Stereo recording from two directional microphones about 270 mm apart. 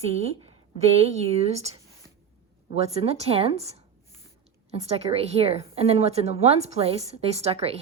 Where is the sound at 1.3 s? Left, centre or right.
Right.